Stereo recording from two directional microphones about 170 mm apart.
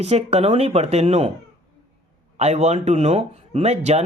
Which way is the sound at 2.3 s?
40° right (ahead or behind).